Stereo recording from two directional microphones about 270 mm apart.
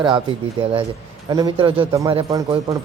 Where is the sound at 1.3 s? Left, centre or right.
Centre.